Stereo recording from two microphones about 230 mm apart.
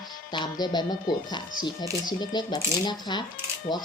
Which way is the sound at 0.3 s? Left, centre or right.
Centre.